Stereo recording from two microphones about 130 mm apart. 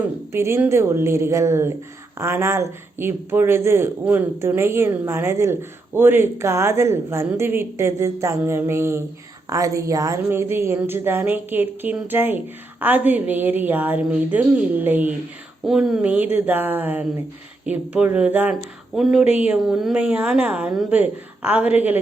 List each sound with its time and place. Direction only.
0.3 s a woman's voice: 20° right (ahead or behind)
18.9 s a woman's voice: centre (ahead or behind)